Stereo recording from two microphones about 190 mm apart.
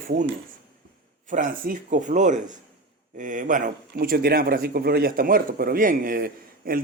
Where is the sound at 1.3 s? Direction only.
45° right (ahead or behind).